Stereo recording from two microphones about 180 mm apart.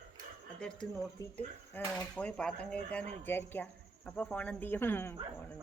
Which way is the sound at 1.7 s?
10° left (ahead or behind).